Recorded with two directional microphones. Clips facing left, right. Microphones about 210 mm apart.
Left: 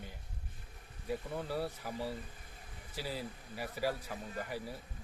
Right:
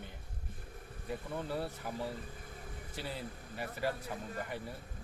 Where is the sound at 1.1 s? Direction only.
5° left (ahead or behind).